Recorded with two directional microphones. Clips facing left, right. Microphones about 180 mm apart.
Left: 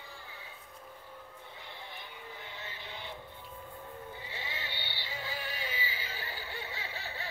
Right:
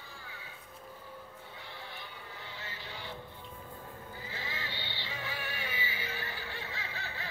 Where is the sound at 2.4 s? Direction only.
20° left (ahead or behind).